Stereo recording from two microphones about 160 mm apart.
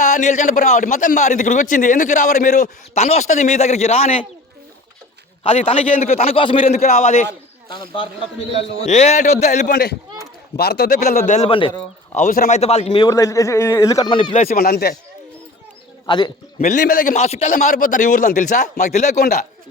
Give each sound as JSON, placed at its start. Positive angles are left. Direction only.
{"t": 0.0, "sound": "a man's voice", "side_deg": 50}
{"t": 5.4, "sound": "a man's voice", "side_deg": 35}
{"t": 6.7, "sound": "a man's voice", "side_deg": 65}
{"t": 7.3, "sound": "a sound", "side_deg": -70}
{"t": 7.9, "sound": "a man's voice", "side_deg": 35}
{"t": 8.8, "sound": "a man's voice", "side_deg": 45}
{"t": 9.7, "sound": "a man's voice", "side_deg": 90}
{"t": 11.3, "sound": "a man's voice", "side_deg": 40}
{"t": 13.1, "sound": "a man's voice", "side_deg": 20}
{"t": 14.5, "sound": "a man's voice", "side_deg": 75}
{"t": 16.0, "sound": "a man's voice", "side_deg": 30}
{"t": 16.6, "sound": "a man's voice", "side_deg": 50}